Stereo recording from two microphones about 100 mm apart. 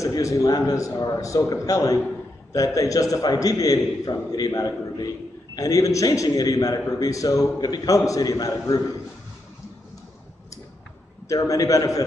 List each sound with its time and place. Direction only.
0.0 s a man's voice: 30° left (ahead or behind)
11.2 s a man's voice: 35° left (ahead or behind)